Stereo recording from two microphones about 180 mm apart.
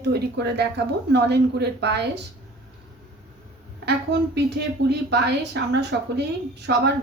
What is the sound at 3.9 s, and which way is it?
A woman's voice, 70° right (ahead or behind).